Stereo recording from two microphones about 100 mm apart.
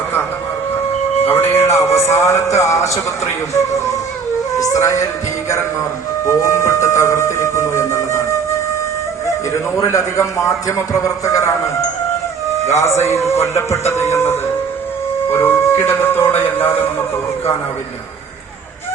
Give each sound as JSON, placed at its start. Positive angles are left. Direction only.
{"t": 1.3, "sound": "a man's voice", "side_deg": 20}
{"t": 6.2, "sound": "music", "side_deg": 30}
{"t": 9.5, "sound": "a man's voice", "side_deg": 30}